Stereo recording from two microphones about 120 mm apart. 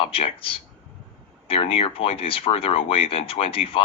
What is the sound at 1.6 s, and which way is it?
Speech, 50° left (ahead or behind).